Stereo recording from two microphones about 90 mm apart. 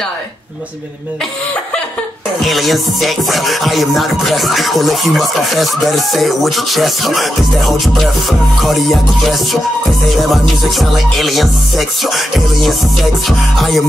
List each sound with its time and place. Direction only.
2.4 s music: centre (ahead or behind)